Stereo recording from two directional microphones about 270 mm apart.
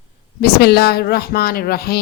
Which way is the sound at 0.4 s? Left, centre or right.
Left.